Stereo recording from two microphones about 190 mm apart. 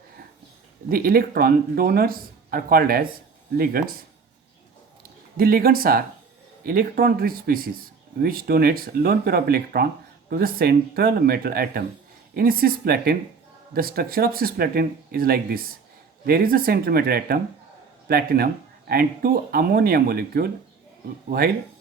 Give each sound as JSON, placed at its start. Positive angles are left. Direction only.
{"t": 0.9, "sound": "speech", "side_deg": -50}
{"t": 5.4, "sound": "speech", "side_deg": -50}